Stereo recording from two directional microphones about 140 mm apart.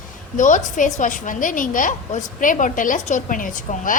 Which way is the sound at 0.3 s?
65° left (ahead or behind).